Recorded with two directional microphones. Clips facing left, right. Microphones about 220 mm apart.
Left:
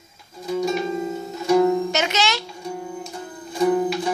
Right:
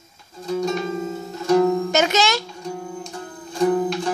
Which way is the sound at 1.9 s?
45° right (ahead or behind).